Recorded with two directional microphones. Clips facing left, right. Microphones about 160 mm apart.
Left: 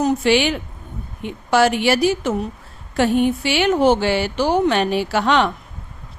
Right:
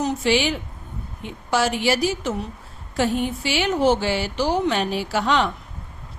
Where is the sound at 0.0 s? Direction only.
65° left (ahead or behind).